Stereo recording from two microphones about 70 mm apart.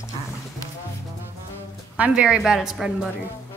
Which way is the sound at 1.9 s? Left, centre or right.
Centre.